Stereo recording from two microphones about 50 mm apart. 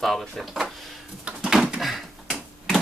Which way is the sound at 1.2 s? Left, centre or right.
Right.